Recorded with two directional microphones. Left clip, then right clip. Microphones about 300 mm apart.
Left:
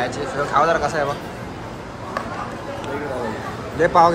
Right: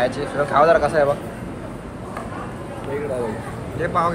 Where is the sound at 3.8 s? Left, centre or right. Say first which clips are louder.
Left 7 dB; centre.